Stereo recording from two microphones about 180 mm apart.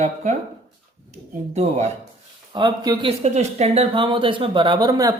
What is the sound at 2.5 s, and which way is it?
Speech, 25° right (ahead or behind).